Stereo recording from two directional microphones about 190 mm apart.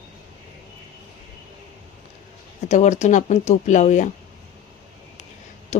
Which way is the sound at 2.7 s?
40° left (ahead or behind).